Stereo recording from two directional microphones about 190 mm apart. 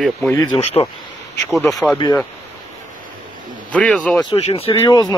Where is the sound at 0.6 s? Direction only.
30° left (ahead or behind).